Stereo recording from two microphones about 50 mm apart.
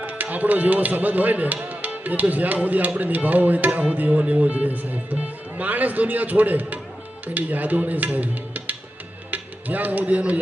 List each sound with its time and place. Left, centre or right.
0.0 s speech: right